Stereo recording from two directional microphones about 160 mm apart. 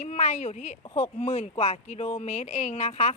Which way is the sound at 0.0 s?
45° left (ahead or behind).